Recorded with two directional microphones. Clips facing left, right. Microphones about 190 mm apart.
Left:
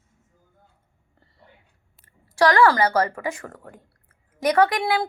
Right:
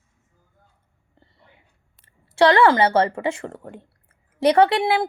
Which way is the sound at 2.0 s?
25° right (ahead or behind).